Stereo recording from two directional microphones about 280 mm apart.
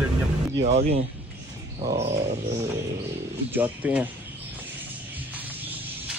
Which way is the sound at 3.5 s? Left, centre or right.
Centre.